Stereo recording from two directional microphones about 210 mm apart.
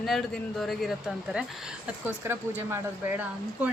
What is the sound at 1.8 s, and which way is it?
Speech, 10° right (ahead or behind).